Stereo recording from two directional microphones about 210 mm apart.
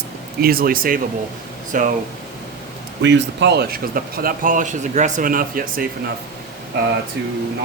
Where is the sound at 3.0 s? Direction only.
60° right (ahead or behind); by 5.8 s 40° right (ahead or behind).